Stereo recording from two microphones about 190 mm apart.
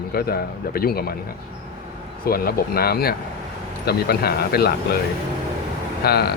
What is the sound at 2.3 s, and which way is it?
Speech, 50° left (ahead or behind).